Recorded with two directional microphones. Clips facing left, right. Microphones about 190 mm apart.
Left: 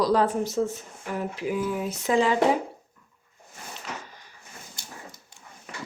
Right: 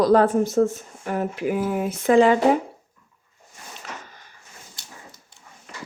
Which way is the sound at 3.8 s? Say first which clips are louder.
Left 1 dB; 50° right (ahead or behind).